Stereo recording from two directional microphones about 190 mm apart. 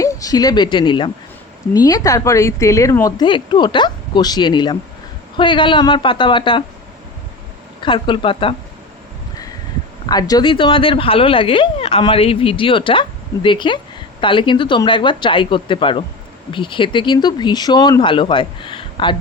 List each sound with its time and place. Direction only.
0.0 s speech: 15° left (ahead or behind)
7.8 s speech: 25° left (ahead or behind)
10.1 s speech: 20° left (ahead or behind)